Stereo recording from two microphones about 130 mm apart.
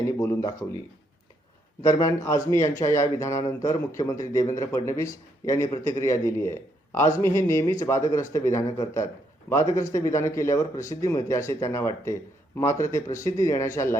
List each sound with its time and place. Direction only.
0.0 s a man's voice: 25° left (ahead or behind)
1.8 s a man's voice: 25° left (ahead or behind)